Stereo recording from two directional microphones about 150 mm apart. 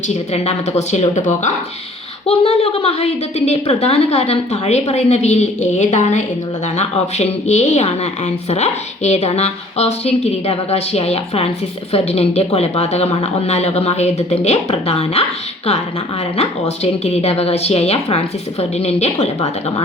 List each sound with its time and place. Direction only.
0.1 s a woman's voice: 45° left (ahead or behind)
2.2 s a woman's voice: 40° left (ahead or behind)
16.4 s a woman's voice: 45° left (ahead or behind)